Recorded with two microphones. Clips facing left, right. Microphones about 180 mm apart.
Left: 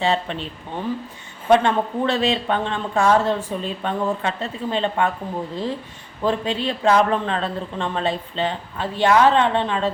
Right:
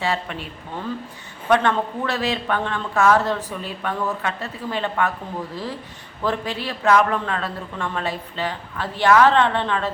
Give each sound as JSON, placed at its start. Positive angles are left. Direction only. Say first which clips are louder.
{"t": 0.0, "sound": "a man's voice", "louder": "left 3 dB", "side_deg": 25}
{"t": 6.2, "sound": "a man's voice", "louder": "left 3 dB", "side_deg": 20}